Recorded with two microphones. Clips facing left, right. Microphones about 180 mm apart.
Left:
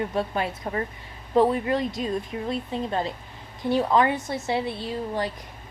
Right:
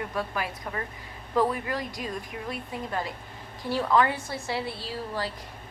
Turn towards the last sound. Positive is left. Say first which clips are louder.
# left 5 dB
turn(degrees=20)  # may be behind; listen again after turning